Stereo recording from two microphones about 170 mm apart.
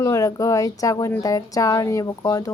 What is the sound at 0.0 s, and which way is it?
Speech, 20° left (ahead or behind).